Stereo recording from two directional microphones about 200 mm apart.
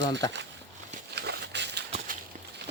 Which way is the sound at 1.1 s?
55° right (ahead or behind).